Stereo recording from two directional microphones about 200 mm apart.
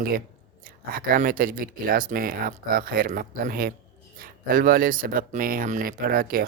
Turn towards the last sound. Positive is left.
turn(degrees=-45)  # may be behind; listen again after turning